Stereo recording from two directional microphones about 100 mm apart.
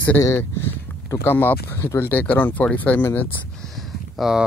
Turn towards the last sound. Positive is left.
turn(degrees=-5)  # may be behind; listen again after turning